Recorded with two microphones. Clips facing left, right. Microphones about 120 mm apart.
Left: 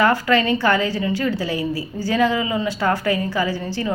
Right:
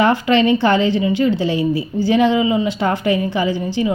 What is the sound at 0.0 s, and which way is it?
A woman's voice, 25° right (ahead or behind).